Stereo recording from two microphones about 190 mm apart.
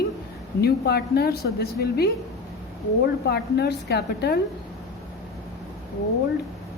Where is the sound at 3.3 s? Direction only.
60° left (ahead or behind).